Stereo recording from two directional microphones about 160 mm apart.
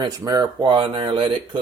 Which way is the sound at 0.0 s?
25° right (ahead or behind).